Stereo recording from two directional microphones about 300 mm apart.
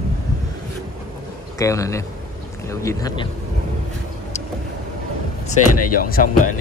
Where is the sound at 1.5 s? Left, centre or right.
Centre.